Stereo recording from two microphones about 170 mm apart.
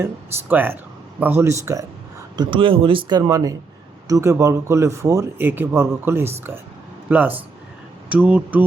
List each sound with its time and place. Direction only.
0.0 s speech: 10° right (ahead or behind)
2.3 s speech: 25° right (ahead or behind); by 8.6 s 10° right (ahead or behind)